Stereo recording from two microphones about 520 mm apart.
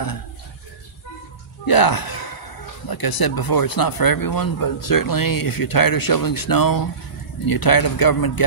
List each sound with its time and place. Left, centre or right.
1.7 s speech: left